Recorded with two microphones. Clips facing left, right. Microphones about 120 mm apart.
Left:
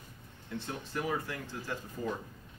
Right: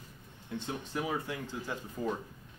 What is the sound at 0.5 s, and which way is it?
Speech, 15° right (ahead or behind).